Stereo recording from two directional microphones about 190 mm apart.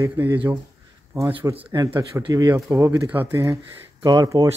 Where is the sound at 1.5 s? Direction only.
20° right (ahead or behind).